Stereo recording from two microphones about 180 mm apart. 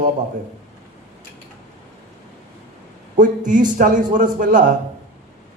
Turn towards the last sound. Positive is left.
turn(degrees=-45)  # may be behind; listen again after turning